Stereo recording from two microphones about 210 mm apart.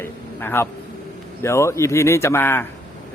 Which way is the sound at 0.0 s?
10° left (ahead or behind).